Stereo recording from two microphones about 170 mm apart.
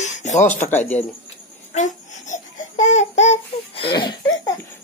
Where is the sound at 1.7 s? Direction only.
45° left (ahead or behind).